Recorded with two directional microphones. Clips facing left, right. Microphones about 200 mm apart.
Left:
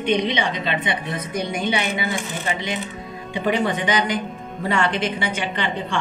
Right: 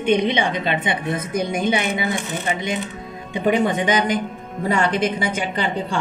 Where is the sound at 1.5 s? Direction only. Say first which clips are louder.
Right 2 dB; 50° right (ahead or behind).